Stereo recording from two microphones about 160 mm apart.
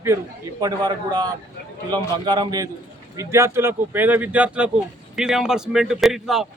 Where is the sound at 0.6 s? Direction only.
25° right (ahead or behind).